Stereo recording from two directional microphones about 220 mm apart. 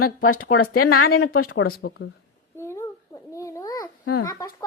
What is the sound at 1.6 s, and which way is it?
Speech, 45° left (ahead or behind).